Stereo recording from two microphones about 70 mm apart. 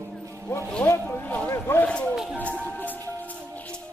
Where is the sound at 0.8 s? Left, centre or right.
Left.